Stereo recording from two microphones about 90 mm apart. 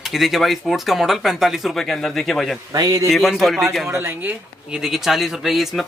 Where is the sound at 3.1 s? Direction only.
Centre (ahead or behind).